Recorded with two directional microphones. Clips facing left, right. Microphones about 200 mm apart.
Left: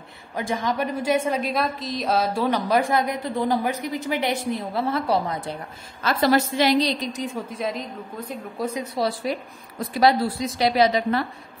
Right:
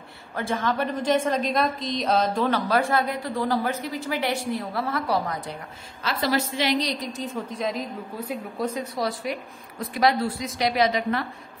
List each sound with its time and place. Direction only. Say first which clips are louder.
0.4 s a woman's voice: left 1 dB; 15° left (ahead or behind)
6.0 s a woman's voice: left 5 dB; 50° left (ahead or behind); by 7.1 s 30° left (ahead or behind)
7.1 s a woman's voice: left 2 dB; 15° left (ahead or behind)
7.6 s a woman's voice: right 1 dB; 5° right (ahead or behind)
8.9 s a woman's voice: left 3 dB; 30° left (ahead or behind)